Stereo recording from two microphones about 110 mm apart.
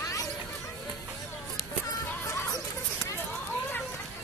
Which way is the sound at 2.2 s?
25° left (ahead or behind).